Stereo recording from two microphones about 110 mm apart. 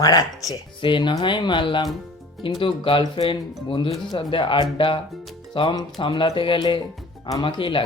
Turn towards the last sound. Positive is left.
turn(degrees=50)  # may be behind; listen again after turning